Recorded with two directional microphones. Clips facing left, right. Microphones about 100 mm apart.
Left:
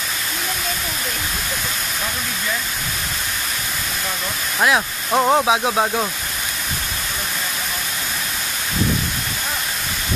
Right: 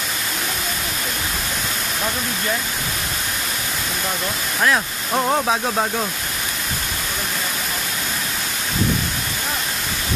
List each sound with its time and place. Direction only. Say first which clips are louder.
4.6 s speech: left 2 dB; 15° left (ahead or behind)